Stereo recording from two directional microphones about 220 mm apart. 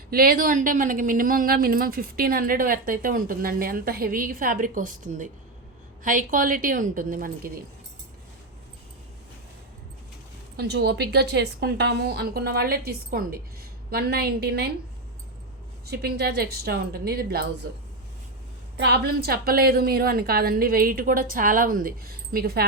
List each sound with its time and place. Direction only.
0.1 s speech: 40° right (ahead or behind)
10.6 s a woman's voice: 45° right (ahead or behind)
15.9 s a woman's voice: 45° right (ahead or behind)
18.8 s a woman's voice: 45° right (ahead or behind)